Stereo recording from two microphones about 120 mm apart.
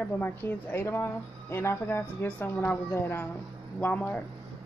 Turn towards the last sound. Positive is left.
turn(degrees=15)  # may be behind; listen again after turning